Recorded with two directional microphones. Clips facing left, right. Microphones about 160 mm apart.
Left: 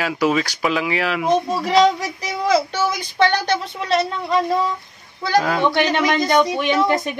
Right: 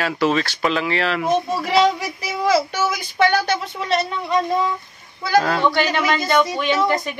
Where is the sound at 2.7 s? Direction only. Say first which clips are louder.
Left 1 dB; 5° right (ahead or behind).